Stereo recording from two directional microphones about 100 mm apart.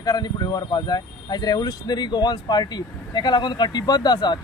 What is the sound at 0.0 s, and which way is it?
Speech, 40° left (ahead or behind).